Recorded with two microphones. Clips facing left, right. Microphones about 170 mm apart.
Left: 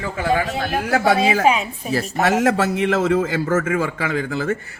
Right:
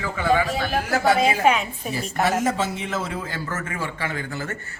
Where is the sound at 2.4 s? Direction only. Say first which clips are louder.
Left 6 dB; 75° left (ahead or behind).